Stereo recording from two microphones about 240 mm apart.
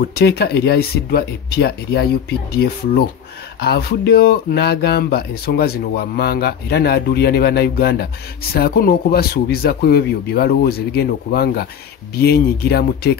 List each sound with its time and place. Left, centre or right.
0.0 s speech: left